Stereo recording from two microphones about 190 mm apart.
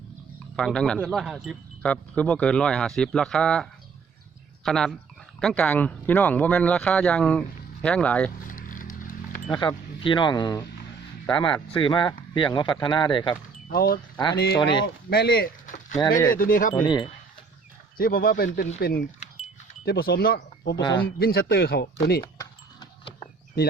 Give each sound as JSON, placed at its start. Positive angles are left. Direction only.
{"t": 0.5, "sound": "speech", "side_deg": 5}
{"t": 8.4, "sound": "a sound", "side_deg": 45}
{"t": 9.6, "sound": "speech", "side_deg": 25}
{"t": 13.7, "sound": "speech", "side_deg": 50}
{"t": 14.6, "sound": "speech", "side_deg": 25}
{"t": 15.1, "sound": "speech", "side_deg": 60}
{"t": 16.8, "sound": "speech", "side_deg": 25}
{"t": 17.9, "sound": "speech", "side_deg": 50}
{"t": 20.7, "sound": "speech", "side_deg": 20}
{"t": 21.2, "sound": "speech", "side_deg": 55}
{"t": 22.2, "sound": "keys jangling", "side_deg": 20}